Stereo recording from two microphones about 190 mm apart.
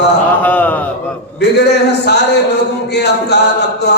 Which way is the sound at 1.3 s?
60° left (ahead or behind).